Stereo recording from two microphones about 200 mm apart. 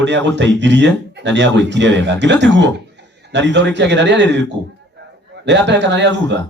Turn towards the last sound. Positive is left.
turn(degrees=-60)  # may be behind; listen again after turning